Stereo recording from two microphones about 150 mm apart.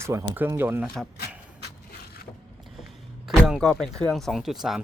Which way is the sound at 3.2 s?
5° right (ahead or behind).